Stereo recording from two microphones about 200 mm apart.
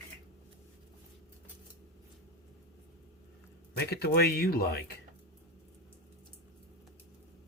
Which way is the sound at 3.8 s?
55° left (ahead or behind).